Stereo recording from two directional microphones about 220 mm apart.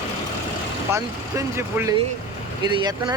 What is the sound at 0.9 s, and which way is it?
Speech, 10° right (ahead or behind).